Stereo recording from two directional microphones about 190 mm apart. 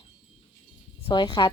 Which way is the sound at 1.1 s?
25° left (ahead or behind).